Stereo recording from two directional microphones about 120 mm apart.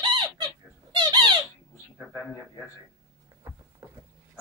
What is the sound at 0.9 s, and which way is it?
Squeak, 40° right (ahead or behind).